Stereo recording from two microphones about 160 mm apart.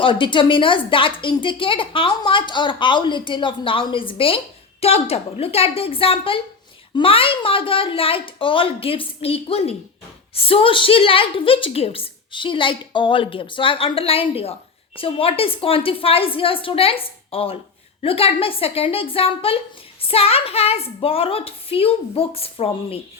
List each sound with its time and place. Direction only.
0.0 s a woman's voice: 30° left (ahead or behind)